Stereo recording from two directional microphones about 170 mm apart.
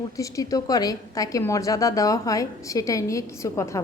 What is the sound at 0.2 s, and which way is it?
A woman's voice, 20° left (ahead or behind).